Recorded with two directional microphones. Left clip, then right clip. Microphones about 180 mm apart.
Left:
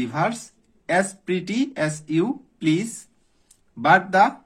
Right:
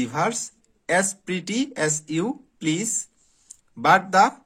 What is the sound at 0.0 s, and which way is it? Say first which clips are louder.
Speech: even; 30° right (ahead or behind).